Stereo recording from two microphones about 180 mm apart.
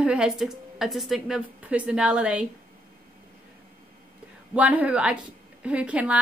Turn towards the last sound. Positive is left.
turn(degrees=-5)  # may be behind; listen again after turning